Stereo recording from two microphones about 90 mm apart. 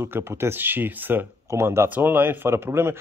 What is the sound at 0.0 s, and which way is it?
Speech, 25° right (ahead or behind).